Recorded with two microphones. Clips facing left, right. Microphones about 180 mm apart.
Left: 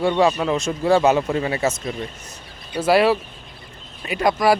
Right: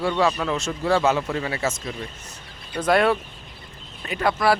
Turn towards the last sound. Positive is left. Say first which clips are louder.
# left 3 dB
turn(degrees=15)  # may be behind; listen again after turning